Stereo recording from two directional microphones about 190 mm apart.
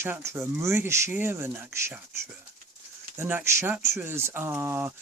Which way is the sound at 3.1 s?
10° right (ahead or behind).